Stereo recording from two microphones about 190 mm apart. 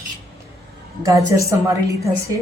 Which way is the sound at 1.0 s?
15° right (ahead or behind).